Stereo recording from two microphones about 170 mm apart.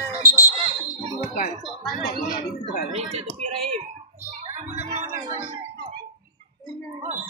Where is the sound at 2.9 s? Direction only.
40° right (ahead or behind).